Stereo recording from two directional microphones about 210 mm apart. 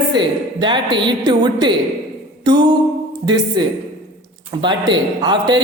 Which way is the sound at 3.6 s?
20° right (ahead or behind).